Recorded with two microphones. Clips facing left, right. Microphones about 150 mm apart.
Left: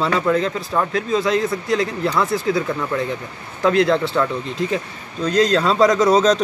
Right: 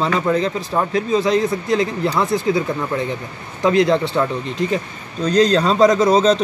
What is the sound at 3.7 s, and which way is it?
Speech, centre (ahead or behind).